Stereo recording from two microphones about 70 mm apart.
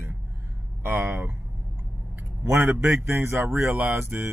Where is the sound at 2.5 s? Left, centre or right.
Right.